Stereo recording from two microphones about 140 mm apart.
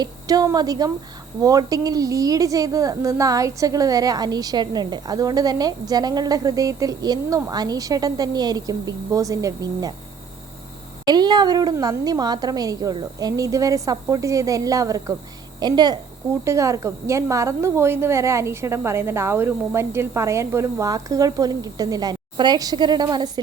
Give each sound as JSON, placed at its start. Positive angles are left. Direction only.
{"t": 0.0, "sound": "a woman's voice", "side_deg": -25}
{"t": 11.0, "sound": "a woman's voice", "side_deg": -30}